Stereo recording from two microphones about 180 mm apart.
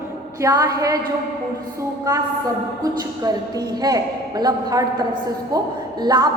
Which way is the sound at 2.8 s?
20° right (ahead or behind).